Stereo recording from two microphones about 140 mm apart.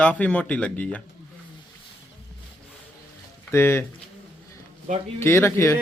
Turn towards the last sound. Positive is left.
turn(degrees=20)  # may be behind; listen again after turning